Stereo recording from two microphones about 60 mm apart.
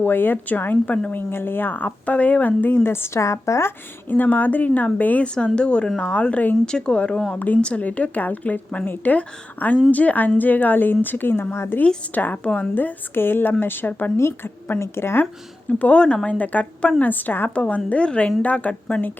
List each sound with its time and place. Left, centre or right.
0.0 s speech: left
4.1 s speech: left
6.7 s speech: centre
7.3 s speech: left
12.1 s speech: left
12.7 s speech: left
15.8 s speech: centre